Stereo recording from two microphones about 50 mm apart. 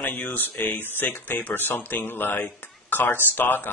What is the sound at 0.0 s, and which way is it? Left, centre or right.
Speech, left.